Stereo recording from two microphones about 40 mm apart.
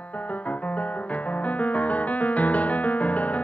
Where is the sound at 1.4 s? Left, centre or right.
Left.